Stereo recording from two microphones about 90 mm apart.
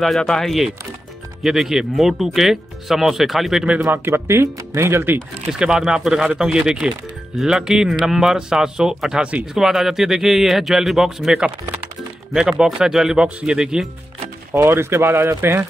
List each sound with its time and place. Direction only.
0.0 s speech: centre (ahead or behind)
3.8 s speech: 25° right (ahead or behind)
5.5 s speech: 5° right (ahead or behind)
14.5 s speech: 30° right (ahead or behind)